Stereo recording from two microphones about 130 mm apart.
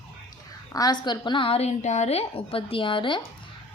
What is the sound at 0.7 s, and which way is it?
A woman's voice, 30° left (ahead or behind).